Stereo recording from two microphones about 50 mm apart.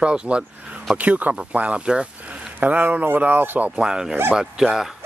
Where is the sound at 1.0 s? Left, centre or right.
Right.